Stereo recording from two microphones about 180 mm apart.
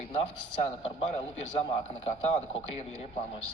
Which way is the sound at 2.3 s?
35° left (ahead or behind).